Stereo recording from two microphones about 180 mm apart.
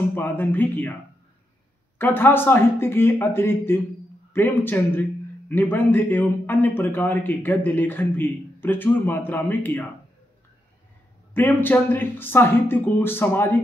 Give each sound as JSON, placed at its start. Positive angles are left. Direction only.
{"t": 0.1, "sound": "a man's voice", "side_deg": 10}
{"t": 2.0, "sound": "a man's voice", "side_deg": 10}
{"t": 11.3, "sound": "a man's voice", "side_deg": 10}